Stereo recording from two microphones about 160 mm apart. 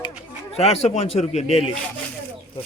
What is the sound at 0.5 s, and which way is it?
A man's voice, 40° left (ahead or behind).